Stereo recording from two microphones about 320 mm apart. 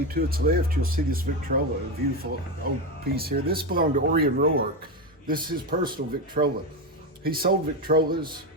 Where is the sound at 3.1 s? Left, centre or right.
Right.